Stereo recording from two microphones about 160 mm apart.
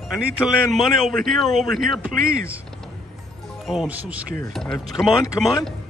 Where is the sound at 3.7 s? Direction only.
5° right (ahead or behind).